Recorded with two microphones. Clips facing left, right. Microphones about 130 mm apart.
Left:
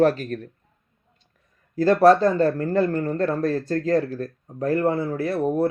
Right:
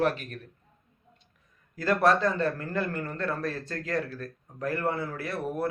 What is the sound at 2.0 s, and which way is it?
A man's voice, 25° left (ahead or behind).